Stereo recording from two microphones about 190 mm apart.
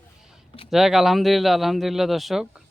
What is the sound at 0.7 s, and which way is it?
Speech, centre (ahead or behind).